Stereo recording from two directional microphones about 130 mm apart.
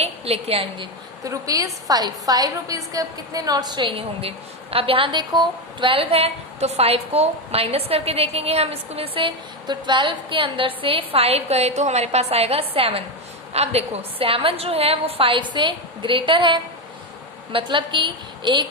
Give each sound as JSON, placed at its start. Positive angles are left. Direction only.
{"t": 0.0, "sound": "a woman's voice", "side_deg": -50}
{"t": 1.2, "sound": "a woman's voice", "side_deg": -25}